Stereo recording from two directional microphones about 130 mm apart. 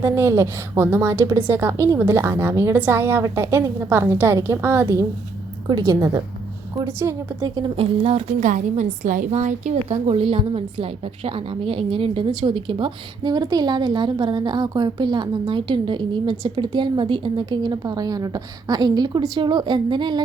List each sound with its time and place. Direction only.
0.0 s a woman's voice: 20° right (ahead or behind)
7.5 s a woman's voice: 40° right (ahead or behind)
8.4 s a woman's voice: 70° right (ahead or behind); by 20.2 s 35° right (ahead or behind)